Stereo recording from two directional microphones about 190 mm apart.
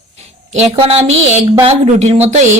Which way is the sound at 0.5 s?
30° right (ahead or behind).